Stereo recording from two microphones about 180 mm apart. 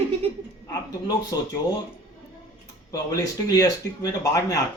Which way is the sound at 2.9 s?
20° left (ahead or behind).